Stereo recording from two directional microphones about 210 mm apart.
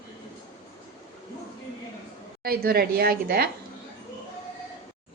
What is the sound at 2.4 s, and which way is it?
A woman's voice, 45° right (ahead or behind).